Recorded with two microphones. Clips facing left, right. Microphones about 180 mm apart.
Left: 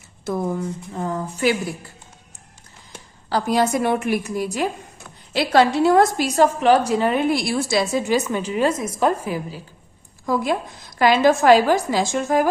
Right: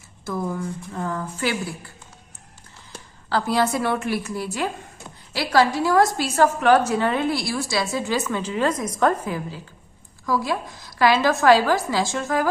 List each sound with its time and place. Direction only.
0.5 s a woman's voice: 30° left (ahead or behind)
3.2 s a woman's voice: 15° left (ahead or behind)